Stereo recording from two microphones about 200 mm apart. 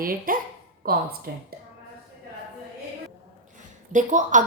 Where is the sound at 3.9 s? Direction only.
40° right (ahead or behind).